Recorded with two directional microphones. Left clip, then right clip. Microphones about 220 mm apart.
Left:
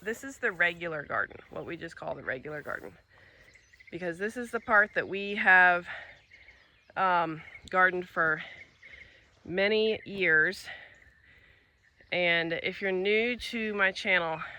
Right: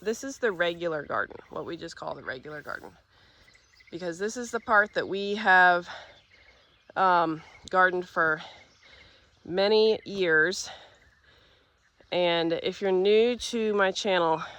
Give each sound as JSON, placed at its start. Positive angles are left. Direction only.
{"t": 0.0, "sound": "speech", "side_deg": -15}
{"t": 3.9, "sound": "speech", "side_deg": -15}
{"t": 12.0, "sound": "speech", "side_deg": -15}